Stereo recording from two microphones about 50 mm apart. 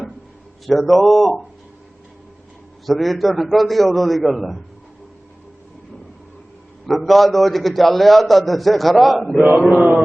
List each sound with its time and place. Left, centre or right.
0.7 s a man's voice: centre
2.8 s a man's voice: centre
6.8 s a man's voice: centre
9.6 s mantra: centre